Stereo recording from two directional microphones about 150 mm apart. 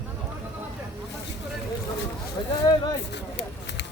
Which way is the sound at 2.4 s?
25° left (ahead or behind).